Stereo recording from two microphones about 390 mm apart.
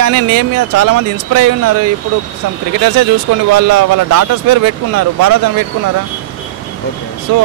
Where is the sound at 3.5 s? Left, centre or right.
Right.